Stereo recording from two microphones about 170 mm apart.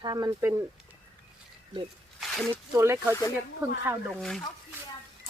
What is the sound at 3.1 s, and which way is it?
Speech, 15° left (ahead or behind).